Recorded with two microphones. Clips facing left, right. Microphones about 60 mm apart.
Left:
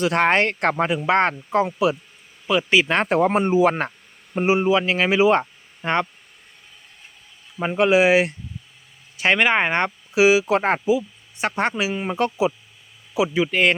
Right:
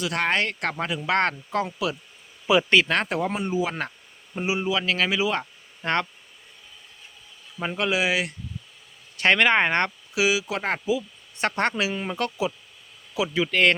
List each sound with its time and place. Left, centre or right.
0.0 s speech: left
2.5 s speech: centre
2.9 s speech: left
5.8 s speech: centre
7.6 s speech: left
9.1 s speech: centre
10.2 s speech: left
11.3 s speech: centre